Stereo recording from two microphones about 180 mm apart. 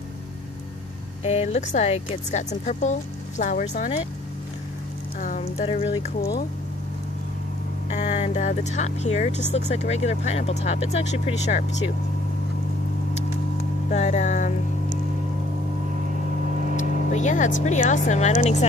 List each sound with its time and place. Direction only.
1.2 s speech: 35° left (ahead or behind)
5.4 s speech: 30° left (ahead or behind)
7.9 s speech: 40° left (ahead or behind)
13.8 s speech: 40° left (ahead or behind)
16.7 s speech: 40° left (ahead or behind)